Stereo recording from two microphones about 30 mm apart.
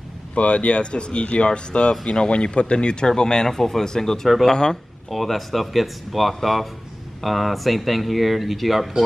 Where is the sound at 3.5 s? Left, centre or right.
Centre.